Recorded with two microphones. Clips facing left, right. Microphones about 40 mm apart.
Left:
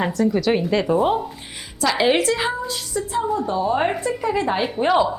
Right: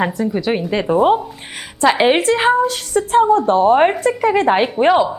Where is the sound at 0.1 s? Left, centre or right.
Centre.